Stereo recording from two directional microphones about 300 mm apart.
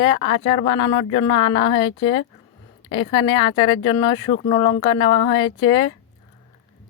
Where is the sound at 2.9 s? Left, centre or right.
Centre.